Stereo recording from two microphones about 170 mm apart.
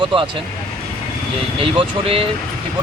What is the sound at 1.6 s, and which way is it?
Speech, 35° right (ahead or behind).